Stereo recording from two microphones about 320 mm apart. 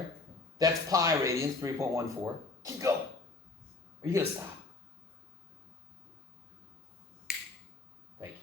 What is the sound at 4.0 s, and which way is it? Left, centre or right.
Speech, centre.